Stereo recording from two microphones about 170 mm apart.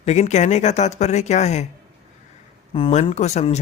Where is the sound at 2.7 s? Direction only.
30° left (ahead or behind).